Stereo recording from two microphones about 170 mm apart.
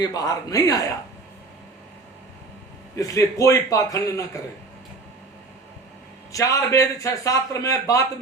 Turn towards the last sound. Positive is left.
turn(degrees=20)  # may be behind; listen again after turning